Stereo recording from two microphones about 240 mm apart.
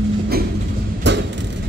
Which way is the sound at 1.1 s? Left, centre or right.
Right.